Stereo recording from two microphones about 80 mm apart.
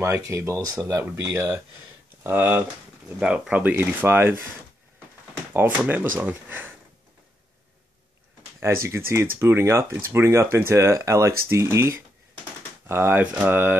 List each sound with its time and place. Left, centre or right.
0.1 s speech: right
2.2 s speech: right
3.2 s speech: centre
3.7 s speech: right
5.7 s speech: right
8.5 s speech: right
13.2 s speech: centre